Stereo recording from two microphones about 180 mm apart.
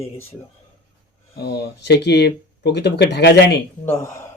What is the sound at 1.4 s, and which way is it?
Speech, 60° left (ahead or behind).